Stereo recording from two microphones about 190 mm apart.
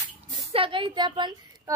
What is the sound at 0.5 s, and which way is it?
A woman's voice, 25° right (ahead or behind).